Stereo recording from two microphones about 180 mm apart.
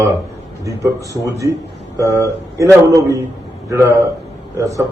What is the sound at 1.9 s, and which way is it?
A man's voice, 15° right (ahead or behind).